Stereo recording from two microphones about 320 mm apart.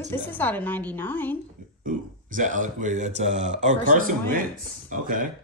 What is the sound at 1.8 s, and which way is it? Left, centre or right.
Speech, right.